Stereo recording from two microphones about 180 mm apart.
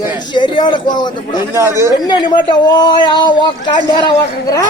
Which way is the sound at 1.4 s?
15° right (ahead or behind).